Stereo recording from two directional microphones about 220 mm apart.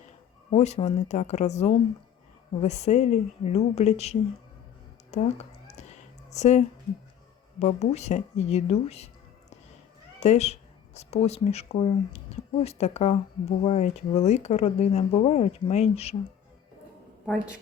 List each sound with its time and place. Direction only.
0.5 s a woman's voice: 30° left (ahead or behind)
5.6 s cat: 30° left (ahead or behind)
7.6 s speech: 30° left (ahead or behind)
10.2 s speech: 30° left (ahead or behind)
17.2 s speech: centre (ahead or behind)